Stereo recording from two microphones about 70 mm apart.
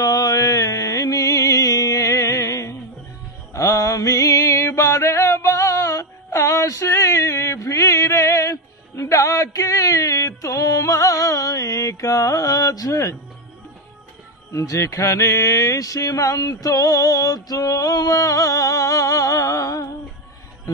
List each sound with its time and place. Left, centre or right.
0.0 s music: left
14.5 s music: left